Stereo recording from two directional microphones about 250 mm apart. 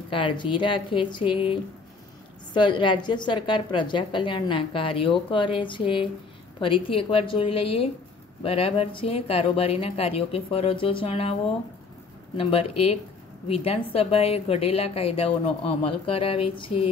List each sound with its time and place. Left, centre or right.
0.1 s a woman's voice: centre
12.4 s a woman's voice: left